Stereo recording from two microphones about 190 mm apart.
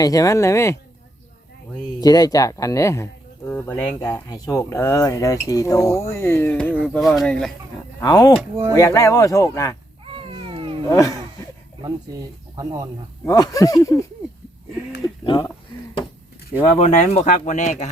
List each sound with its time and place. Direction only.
0.0 s speech: 15° left (ahead or behind)
2.0 s speech: 20° left (ahead or behind); by 7.5 s centre (ahead or behind)
8.0 s speech: 20° left (ahead or behind)
8.4 s speech: 15° right (ahead or behind)
8.7 s speech: 15° left (ahead or behind)
10.0 s cat: 30° right (ahead or behind)
10.8 s speech: 15° left (ahead or behind)
11.8 s speech: 20° right (ahead or behind)
13.2 s speech: 20° left (ahead or behind)
15.0 s speech: 20° left (ahead or behind)
16.7 s speech: 35° left (ahead or behind)